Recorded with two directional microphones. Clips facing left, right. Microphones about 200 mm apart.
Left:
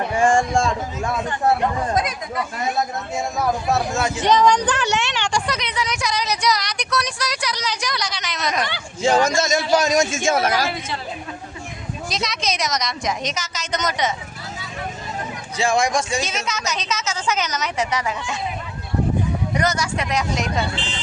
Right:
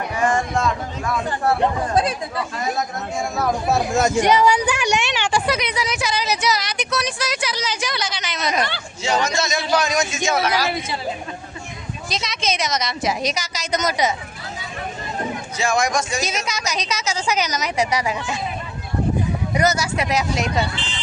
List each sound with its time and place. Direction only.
0.1 s a sound: 25° left (ahead or behind)
2.0 s speech: 30° right (ahead or behind)
3.9 s speech: 45° right (ahead or behind)
4.2 s a woman's voice: 10° right (ahead or behind)
9.0 s a man's voice: 50° left (ahead or behind)
12.0 s a woman's voice: centre (ahead or behind)
15.5 s speech: 30° left (ahead or behind)
16.3 s a woman's voice: 10° right (ahead or behind)
19.5 s a woman's voice: 5° right (ahead or behind)